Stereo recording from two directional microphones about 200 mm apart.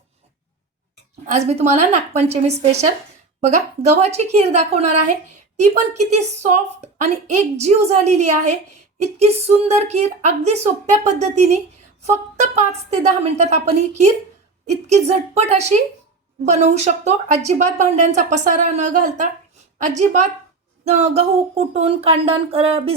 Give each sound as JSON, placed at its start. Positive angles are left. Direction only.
{"t": 1.3, "sound": "a woman's voice", "side_deg": -35}
{"t": 4.0, "sound": "a woman's voice", "side_deg": -35}
{"t": 20.8, "sound": "a sound", "side_deg": -30}